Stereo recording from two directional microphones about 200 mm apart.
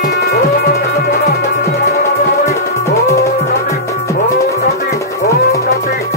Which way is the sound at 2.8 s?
15° left (ahead or behind).